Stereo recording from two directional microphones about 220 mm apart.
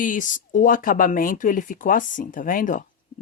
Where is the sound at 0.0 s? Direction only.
35° left (ahead or behind).